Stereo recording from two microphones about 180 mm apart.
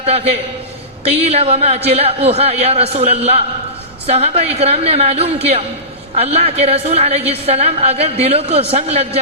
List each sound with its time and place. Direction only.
0.0 s a woman's voice: 35° right (ahead or behind)